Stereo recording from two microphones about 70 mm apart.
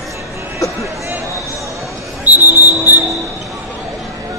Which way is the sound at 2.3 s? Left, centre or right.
Right.